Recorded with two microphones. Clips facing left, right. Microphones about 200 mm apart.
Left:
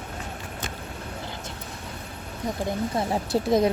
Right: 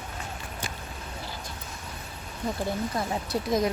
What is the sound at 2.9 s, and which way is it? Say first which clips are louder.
Speech: left 4 dB; 30° left (ahead or behind).